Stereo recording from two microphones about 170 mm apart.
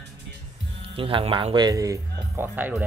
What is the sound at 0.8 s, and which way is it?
Speech, 35° right (ahead or behind).